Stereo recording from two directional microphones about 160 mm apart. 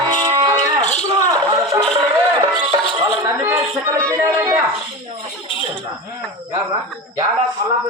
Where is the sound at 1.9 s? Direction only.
25° right (ahead or behind).